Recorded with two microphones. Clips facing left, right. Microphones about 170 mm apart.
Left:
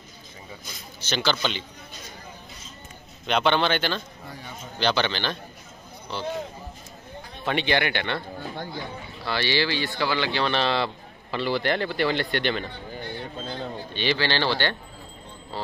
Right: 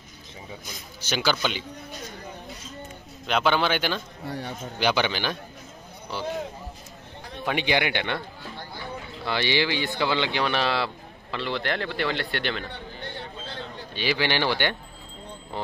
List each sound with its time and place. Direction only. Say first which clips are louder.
1.0 s speech: even; 10° right (ahead or behind)
3.3 s speech: left 1 dB; 5° right (ahead or behind)
4.3 s speech: right 9 dB; 70° right (ahead or behind)
4.7 s speech: even; 10° right (ahead or behind)
7.4 s speech: left 1 dB; 10° right (ahead or behind)
9.2 s speech: even; 20° right (ahead or behind)
11.3 s speech: left 4 dB; 5° left (ahead or behind)
13.9 s speech: even; 10° right (ahead or behind)
15.5 s music: right 1 dB; 20° right (ahead or behind)